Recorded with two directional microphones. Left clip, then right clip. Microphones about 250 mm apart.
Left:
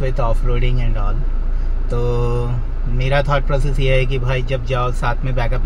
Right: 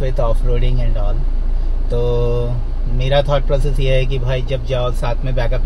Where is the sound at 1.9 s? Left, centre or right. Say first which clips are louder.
Right 3 dB; centre.